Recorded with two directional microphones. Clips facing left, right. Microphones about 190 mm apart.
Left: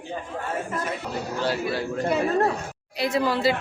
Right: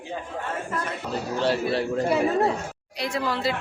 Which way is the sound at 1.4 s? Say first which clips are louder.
Right 3 dB; 25° right (ahead or behind).